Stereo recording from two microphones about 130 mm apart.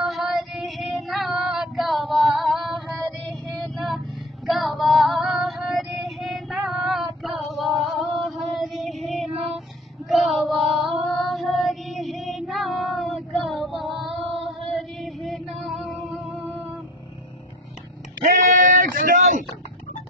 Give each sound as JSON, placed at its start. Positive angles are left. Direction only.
{"t": 0.0, "sound": "child singing", "side_deg": 0}
{"t": 3.6, "sound": "vehicle", "side_deg": 0}
{"t": 4.5, "sound": "female singing", "side_deg": 0}
{"t": 10.0, "sound": "child singing", "side_deg": 0}
{"t": 18.2, "sound": "a sound", "side_deg": -80}